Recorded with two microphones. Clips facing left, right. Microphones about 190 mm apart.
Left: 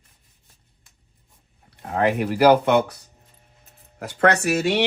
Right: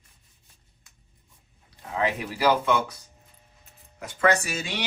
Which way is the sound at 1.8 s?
60° left (ahead or behind).